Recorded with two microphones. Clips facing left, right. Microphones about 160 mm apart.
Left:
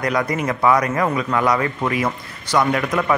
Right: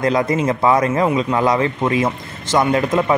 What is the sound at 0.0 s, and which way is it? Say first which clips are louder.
Speech: right 4 dB; 25° right (ahead or behind).